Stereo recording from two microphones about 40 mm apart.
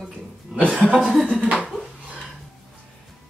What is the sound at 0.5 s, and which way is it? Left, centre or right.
Speech, right.